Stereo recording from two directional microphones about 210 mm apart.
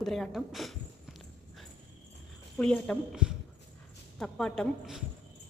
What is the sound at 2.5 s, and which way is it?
A woman's voice, 5° left (ahead or behind).